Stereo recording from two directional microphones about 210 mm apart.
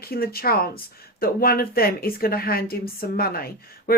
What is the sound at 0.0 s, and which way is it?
Speech, 45° left (ahead or behind).